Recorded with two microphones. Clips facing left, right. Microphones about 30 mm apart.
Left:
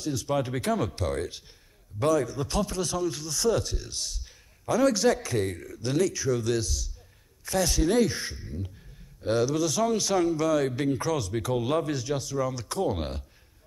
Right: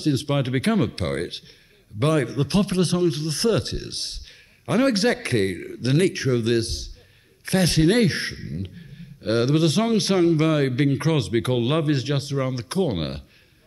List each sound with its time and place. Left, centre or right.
0.0 s a man's voice: right